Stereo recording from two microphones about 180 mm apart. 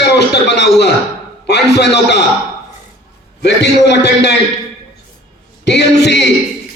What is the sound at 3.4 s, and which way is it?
Speech, 70° left (ahead or behind).